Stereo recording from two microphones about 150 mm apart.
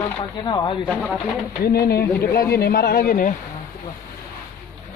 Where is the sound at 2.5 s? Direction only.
90° left.